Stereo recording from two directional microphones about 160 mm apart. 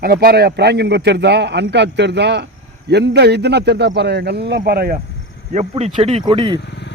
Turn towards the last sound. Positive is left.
turn(degrees=-30)  # may be behind; listen again after turning